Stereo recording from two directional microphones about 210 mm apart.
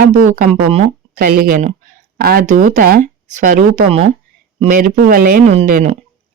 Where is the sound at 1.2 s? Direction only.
45° right (ahead or behind).